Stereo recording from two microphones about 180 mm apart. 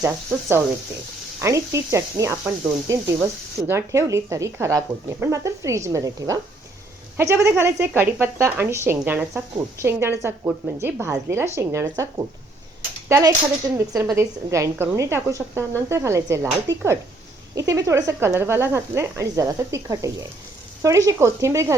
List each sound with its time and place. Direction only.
0.3 s speech: 15° right (ahead or behind)